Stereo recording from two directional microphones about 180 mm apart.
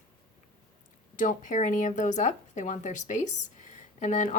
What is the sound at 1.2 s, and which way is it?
Speech, 45° left (ahead or behind).